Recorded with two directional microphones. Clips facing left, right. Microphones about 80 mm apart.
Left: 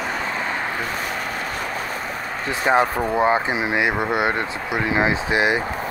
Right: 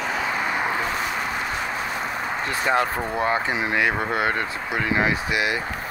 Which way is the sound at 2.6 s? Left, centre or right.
Left.